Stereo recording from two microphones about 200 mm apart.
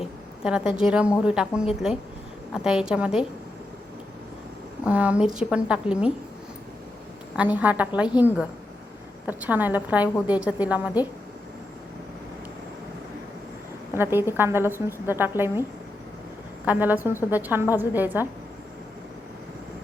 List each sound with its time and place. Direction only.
0.4 s a woman's voice: 5° right (ahead or behind)
4.9 s a woman's voice: 5° right (ahead or behind)
7.3 s a woman's voice: 10° right (ahead or behind)
9.2 s a woman's voice: 10° right (ahead or behind)
13.9 s a woman's voice: 10° right (ahead or behind)
16.6 s a woman's voice: 10° right (ahead or behind)